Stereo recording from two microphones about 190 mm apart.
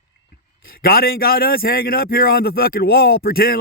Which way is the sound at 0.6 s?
50° left (ahead or behind).